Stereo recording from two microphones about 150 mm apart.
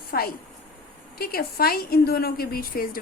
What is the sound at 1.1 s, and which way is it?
A woman's voice, 90° left.